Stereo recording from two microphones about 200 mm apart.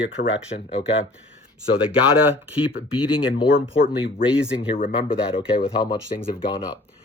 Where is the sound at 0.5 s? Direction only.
35° left (ahead or behind).